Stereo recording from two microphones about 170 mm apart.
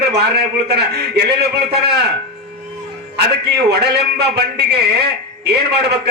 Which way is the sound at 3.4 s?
75° right (ahead or behind).